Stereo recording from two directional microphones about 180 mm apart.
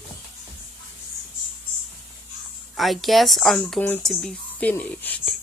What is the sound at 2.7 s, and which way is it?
Speech, centre (ahead or behind).